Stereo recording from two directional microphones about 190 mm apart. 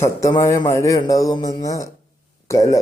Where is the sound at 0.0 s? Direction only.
15° left (ahead or behind).